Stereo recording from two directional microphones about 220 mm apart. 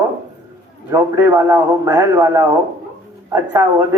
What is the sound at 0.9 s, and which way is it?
A man's voice, 15° right (ahead or behind).